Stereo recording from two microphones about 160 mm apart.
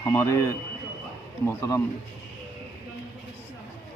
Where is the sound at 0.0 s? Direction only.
20° left (ahead or behind).